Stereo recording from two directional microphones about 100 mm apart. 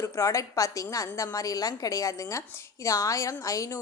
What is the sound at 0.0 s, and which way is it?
A woman's voice, 30° left (ahead or behind).